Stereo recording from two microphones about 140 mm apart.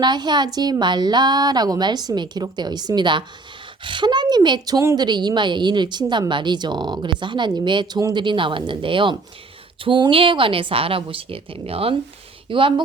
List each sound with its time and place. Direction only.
0.0 s speech: 30° right (ahead or behind)